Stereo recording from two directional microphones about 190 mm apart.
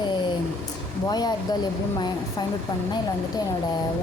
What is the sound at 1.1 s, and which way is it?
Speech, 20° left (ahead or behind).